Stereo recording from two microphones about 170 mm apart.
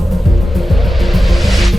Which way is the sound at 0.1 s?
Centre (ahead or behind).